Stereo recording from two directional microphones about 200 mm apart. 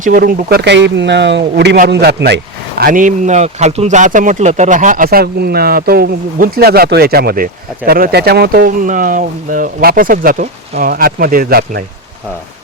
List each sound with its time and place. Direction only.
0.0 s speech: 45° right (ahead or behind)